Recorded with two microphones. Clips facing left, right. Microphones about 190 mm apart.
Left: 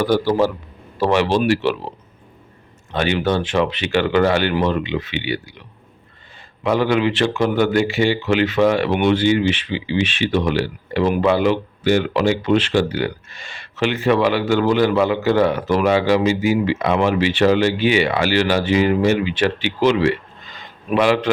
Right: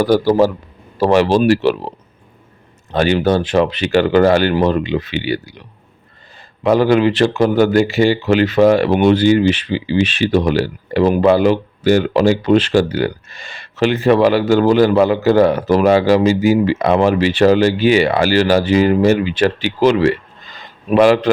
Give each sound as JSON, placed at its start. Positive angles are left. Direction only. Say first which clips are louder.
{"t": 0.0, "sound": "speech", "louder": "right 4 dB", "side_deg": -40}
{"t": 2.9, "sound": "speech", "louder": "right 5 dB", "side_deg": -40}